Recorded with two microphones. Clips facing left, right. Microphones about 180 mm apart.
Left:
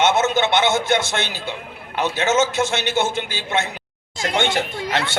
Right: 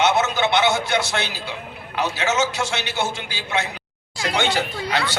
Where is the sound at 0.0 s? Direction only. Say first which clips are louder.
Left 2 dB; 45° left (ahead or behind).